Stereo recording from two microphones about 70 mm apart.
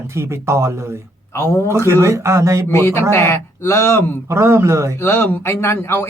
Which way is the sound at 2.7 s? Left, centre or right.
Left.